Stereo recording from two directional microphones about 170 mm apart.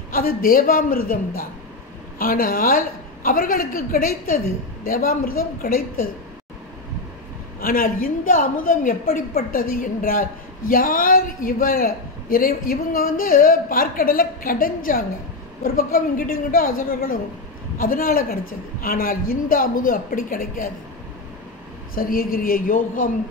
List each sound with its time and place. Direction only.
0.1 s a man's voice: 55° left (ahead or behind)
7.6 s a man's voice: 55° left (ahead or behind)
21.9 s a man's voice: 60° left (ahead or behind)